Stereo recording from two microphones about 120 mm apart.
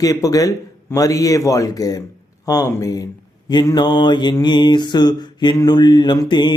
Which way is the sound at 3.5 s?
35° left (ahead or behind).